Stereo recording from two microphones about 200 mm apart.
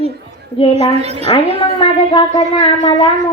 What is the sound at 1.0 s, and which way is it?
Speech, 30° right (ahead or behind).